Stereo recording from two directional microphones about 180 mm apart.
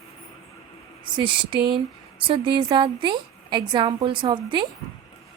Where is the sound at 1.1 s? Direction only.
25° right (ahead or behind).